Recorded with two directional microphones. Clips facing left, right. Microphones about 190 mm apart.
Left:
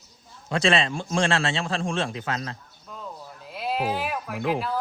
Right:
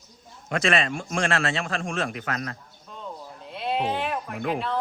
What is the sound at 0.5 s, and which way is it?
A man's voice, 30° left (ahead or behind).